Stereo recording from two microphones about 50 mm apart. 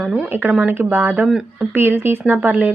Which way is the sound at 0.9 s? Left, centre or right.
Right.